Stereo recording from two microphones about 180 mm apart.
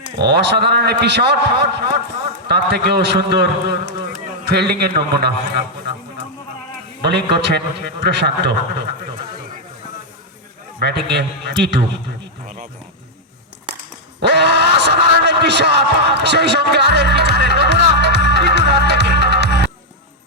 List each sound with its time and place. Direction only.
0.2 s a man's voice: 65° right (ahead or behind)
7.0 s a man's voice: 65° right (ahead or behind)
10.8 s a man's voice: 65° right (ahead or behind)
14.2 s a sound: 70° right (ahead or behind)